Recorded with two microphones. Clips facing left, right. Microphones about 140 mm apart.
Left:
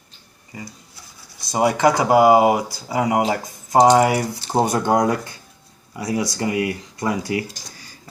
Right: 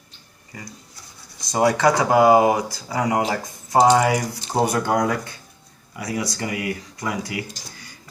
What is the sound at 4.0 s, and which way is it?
Speech, 30° left (ahead or behind).